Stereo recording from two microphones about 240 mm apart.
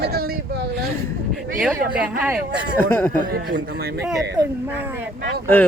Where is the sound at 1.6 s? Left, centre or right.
Centre.